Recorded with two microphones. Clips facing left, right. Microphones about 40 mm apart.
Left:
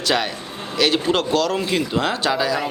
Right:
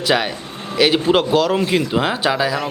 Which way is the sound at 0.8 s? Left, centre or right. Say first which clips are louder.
Right 4 dB; centre.